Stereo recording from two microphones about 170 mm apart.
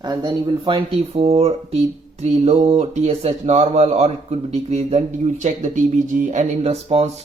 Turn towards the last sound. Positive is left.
turn(degrees=-35)  # may be behind; listen again after turning